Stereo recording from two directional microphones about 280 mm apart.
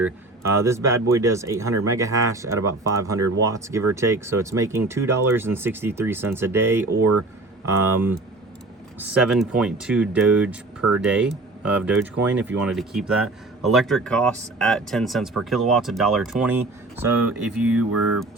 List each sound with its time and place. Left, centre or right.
0.0 s speech: centre
7.0 s speech: right
7.6 s a man's voice: centre